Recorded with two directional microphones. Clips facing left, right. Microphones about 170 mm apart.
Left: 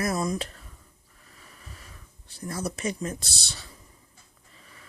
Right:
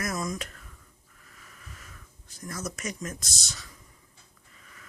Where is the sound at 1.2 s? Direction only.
30° left (ahead or behind).